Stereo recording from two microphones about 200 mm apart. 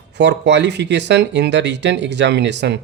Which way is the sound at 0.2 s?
60° right (ahead or behind).